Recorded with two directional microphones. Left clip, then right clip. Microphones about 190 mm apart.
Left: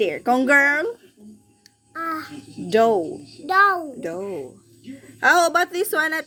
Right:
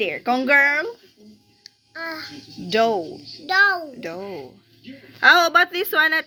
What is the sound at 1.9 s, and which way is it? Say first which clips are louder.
Child singing: left 3 dB; 50° left (ahead or behind).